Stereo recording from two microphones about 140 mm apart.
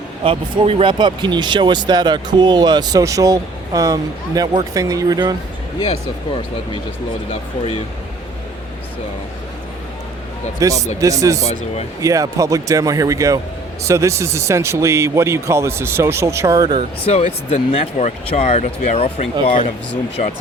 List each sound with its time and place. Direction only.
0.3 s speech: 40° right (ahead or behind); by 5.3 s 25° right (ahead or behind)
7.3 s speech: 40° left (ahead or behind)
10.6 s speech: 25° right (ahead or behind)
11.4 s speech: 50° left (ahead or behind)
11.9 s speech: 25° right (ahead or behind)
17.1 s speech: 50° left (ahead or behind)
20.2 s speech: 60° left (ahead or behind)